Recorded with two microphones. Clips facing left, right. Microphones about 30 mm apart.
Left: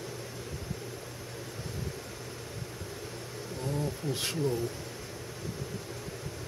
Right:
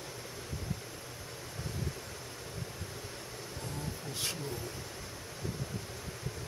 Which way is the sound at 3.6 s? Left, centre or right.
Centre.